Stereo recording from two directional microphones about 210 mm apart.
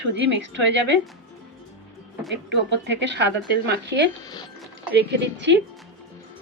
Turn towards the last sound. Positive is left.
turn(degrees=-55)  # may be behind; listen again after turning